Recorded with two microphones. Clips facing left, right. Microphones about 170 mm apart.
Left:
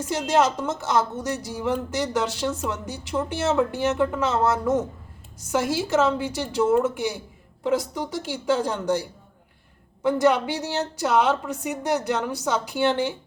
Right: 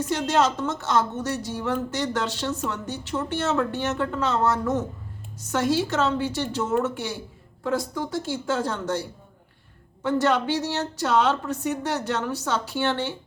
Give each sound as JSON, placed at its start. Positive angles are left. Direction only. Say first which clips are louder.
{"t": 0.1, "sound": "speech", "louder": "left 2 dB", "side_deg": 10}